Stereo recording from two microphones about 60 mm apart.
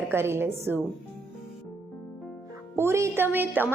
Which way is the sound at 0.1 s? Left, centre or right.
Right.